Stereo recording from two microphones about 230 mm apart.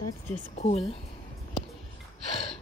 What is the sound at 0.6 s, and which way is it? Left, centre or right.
Speech, left.